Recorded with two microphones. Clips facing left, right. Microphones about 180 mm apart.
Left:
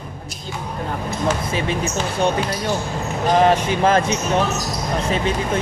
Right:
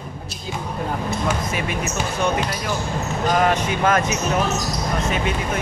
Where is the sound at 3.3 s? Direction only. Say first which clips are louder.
Left 5 dB; 30° left (ahead or behind).